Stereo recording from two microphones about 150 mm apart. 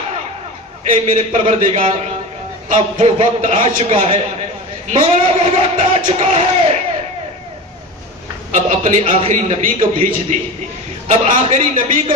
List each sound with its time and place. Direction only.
0.8 s a man's voice: 55° right (ahead or behind)
1.7 s a man's voice: 40° right (ahead or behind)
8.5 s a man's voice: 55° right (ahead or behind)
11.1 s a man's voice: 45° right (ahead or behind)